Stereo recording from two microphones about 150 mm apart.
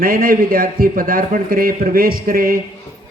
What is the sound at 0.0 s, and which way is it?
A man's voice, 70° right (ahead or behind).